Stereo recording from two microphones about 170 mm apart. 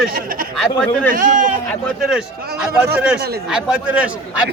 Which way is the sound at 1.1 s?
50° right (ahead or behind).